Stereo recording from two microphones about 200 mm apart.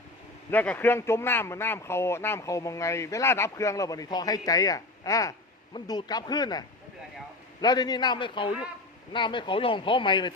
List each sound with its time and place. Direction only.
0.5 s speech: 10° left (ahead or behind); by 10.3 s 25° left (ahead or behind)